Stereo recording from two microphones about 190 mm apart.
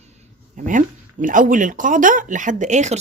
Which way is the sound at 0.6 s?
45° right (ahead or behind).